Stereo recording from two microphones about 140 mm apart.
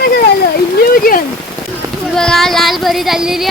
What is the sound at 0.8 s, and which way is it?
Speech, 90° left.